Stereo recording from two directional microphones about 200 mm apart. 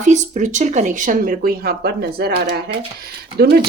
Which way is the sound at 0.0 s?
35° right (ahead or behind).